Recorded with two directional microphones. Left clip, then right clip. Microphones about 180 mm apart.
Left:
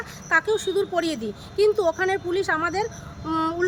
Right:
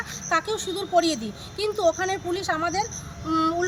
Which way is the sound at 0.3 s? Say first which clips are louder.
Left 5 dB; 30° left (ahead or behind).